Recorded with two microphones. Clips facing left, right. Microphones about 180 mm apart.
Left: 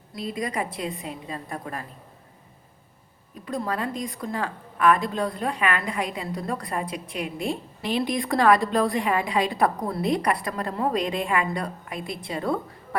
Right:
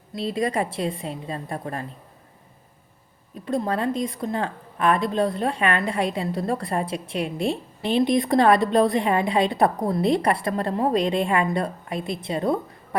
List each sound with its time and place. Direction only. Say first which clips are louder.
0.1 s a woman's voice: right 5 dB; 30° right (ahead or behind)
3.4 s a woman's voice: right 4 dB; 25° right (ahead or behind)